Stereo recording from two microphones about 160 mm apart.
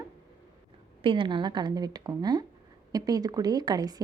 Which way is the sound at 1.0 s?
35° right (ahead or behind).